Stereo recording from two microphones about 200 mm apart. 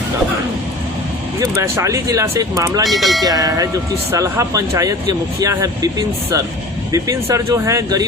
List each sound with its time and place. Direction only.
1.4 s speech: 15° right (ahead or behind)
2.8 s speech: centre (ahead or behind)
3.2 s speech: 20° right (ahead or behind)